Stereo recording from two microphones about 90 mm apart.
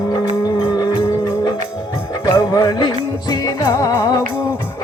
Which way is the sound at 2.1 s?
45° left (ahead or behind).